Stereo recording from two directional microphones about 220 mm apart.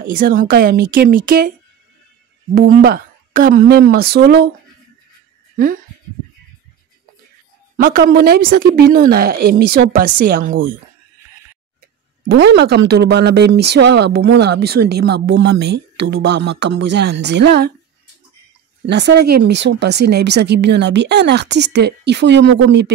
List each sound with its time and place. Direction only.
0.0 s a woman's voice: 40° right (ahead or behind)
2.5 s speech: 40° right (ahead or behind)
7.7 s speech: 40° right (ahead or behind)
12.3 s speech: 50° right (ahead or behind)
18.9 s speech: 50° right (ahead or behind)